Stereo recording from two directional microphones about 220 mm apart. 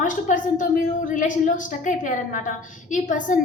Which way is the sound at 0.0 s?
35° left (ahead or behind).